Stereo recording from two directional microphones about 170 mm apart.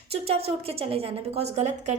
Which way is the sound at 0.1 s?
35° right (ahead or behind).